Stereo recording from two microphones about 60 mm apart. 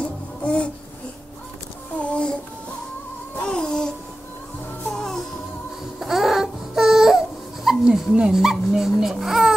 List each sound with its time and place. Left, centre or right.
0.0 s music: left
2.0 s child singing: centre
3.4 s babbling: centre
4.9 s music: centre
5.9 s baby cry: centre
7.8 s speech: centre